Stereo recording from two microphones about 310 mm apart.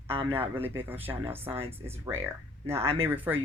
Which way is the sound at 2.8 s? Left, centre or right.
Centre.